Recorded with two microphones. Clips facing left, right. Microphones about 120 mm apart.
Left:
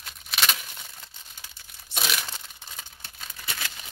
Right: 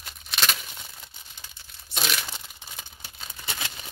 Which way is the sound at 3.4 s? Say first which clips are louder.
Right 1 dB; 25° right (ahead or behind).